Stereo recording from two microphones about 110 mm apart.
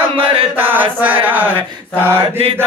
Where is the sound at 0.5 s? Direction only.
20° right (ahead or behind).